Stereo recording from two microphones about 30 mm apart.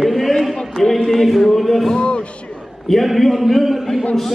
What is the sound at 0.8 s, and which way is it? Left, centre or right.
Music, centre.